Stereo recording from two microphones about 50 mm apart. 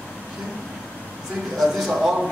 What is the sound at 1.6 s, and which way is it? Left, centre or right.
Speech, centre.